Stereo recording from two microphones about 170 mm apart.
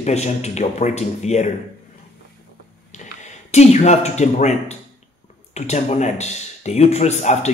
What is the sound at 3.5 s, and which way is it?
Speech, 40° left (ahead or behind).